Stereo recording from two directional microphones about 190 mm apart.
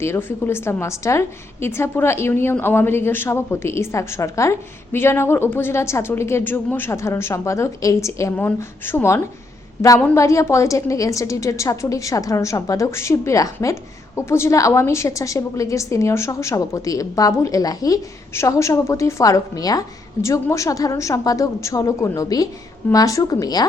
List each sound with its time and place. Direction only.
0.0 s a woman's voice: 10° left (ahead or behind)